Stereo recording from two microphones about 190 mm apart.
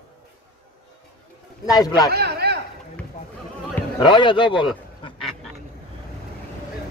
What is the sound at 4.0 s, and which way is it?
Speech, 25° left (ahead or behind).